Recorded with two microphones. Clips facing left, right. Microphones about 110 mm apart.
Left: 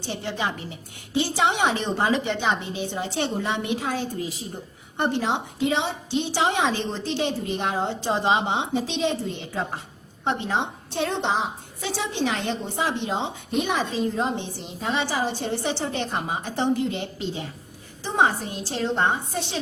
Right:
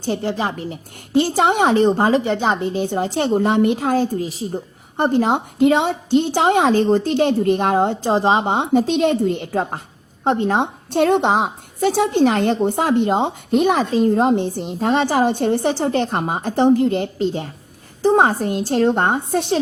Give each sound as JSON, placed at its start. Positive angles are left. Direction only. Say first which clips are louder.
{"t": 0.0, "sound": "a woman's voice", "louder": "right 7 dB", "side_deg": -40}
{"t": 4.2, "sound": "a woman's voice", "louder": "right 7 dB", "side_deg": -30}
{"t": 8.1, "sound": "a woman's voice", "louder": "right 4 dB", "side_deg": -40}